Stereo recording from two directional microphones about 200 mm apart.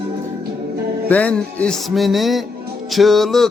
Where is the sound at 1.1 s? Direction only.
5° left (ahead or behind).